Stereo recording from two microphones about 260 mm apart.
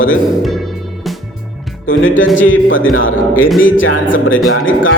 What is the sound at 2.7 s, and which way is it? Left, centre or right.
Speech, left.